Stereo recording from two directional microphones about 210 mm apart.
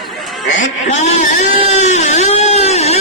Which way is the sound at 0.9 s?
30° left (ahead or behind).